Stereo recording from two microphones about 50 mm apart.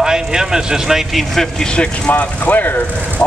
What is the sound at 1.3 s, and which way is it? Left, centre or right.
Speech, centre.